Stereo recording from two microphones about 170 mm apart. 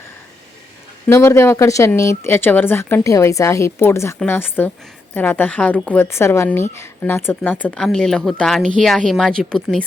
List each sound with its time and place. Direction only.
1.0 s a woman's voice: 15° left (ahead or behind)